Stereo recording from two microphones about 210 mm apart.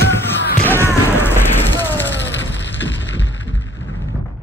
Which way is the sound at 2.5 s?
60° left (ahead or behind).